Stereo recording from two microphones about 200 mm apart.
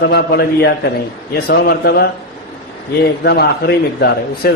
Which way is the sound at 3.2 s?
50° left (ahead or behind).